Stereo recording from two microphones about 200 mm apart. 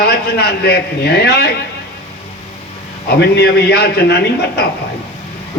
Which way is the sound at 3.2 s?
55° left (ahead or behind).